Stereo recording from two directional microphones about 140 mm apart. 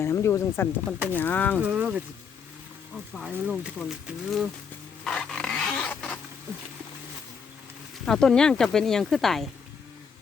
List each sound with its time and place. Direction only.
0.0 s speech: 20° left (ahead or behind)
1.6 s speech: 10° right (ahead or behind)
3.4 s speech: 5° right (ahead or behind)
5.0 s zipper: 5° left (ahead or behind)
8.0 s speech: 5° left (ahead or behind)